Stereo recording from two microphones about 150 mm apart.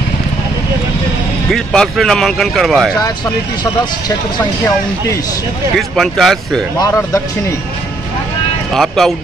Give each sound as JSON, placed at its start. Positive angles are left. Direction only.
{"t": 1.5, "sound": "speech", "side_deg": 5}
{"t": 5.8, "sound": "speech", "side_deg": 0}
{"t": 6.8, "sound": "speech", "side_deg": 15}
{"t": 8.7, "sound": "speech", "side_deg": 0}